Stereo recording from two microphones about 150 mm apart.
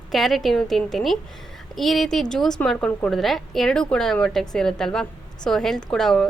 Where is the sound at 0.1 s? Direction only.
Centre (ahead or behind).